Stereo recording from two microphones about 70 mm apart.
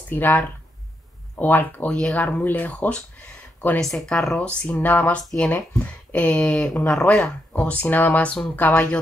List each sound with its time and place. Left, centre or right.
0.1 s speech: left
1.9 s speech: centre
3.8 s speech: centre
4.5 s speech: centre